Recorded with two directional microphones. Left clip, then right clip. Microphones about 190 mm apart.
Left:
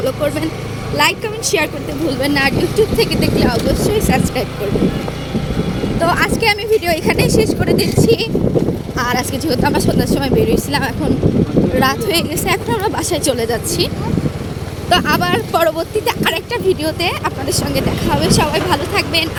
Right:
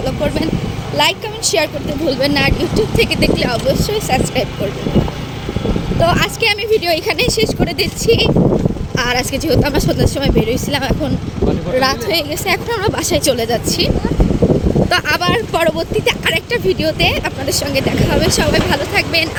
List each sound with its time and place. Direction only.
0.9 s speech: 10° right (ahead or behind)
6.0 s speech: 15° right (ahead or behind)
9.0 s speech: 20° right (ahead or behind)
12.7 s speech: 20° right (ahead or behind)